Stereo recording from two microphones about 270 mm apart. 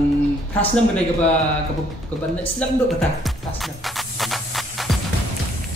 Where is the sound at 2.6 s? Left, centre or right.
Centre.